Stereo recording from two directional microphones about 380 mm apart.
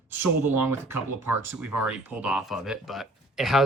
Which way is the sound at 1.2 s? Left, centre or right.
Centre.